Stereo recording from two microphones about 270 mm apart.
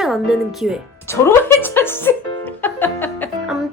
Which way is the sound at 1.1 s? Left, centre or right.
Centre.